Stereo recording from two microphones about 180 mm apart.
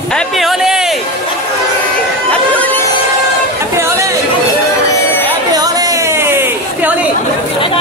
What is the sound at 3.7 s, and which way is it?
Chatter, 15° right (ahead or behind).